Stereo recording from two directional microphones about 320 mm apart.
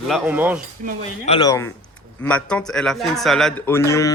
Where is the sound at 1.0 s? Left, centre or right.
Centre.